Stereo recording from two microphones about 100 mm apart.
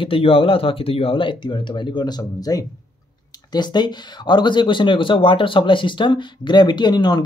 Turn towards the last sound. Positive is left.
turn(degrees=45)  # may be behind; listen again after turning